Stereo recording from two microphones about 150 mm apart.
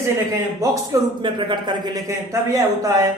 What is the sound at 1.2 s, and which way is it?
Speech, 30° right (ahead or behind).